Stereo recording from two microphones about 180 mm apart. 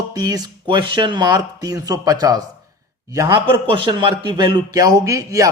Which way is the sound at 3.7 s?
25° right (ahead or behind).